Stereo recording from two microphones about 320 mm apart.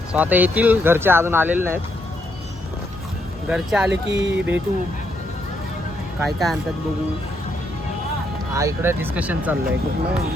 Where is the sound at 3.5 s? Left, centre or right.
Centre.